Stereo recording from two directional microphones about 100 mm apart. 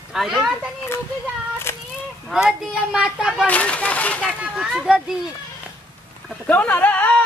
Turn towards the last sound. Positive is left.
turn(degrees=15)  # may be behind; listen again after turning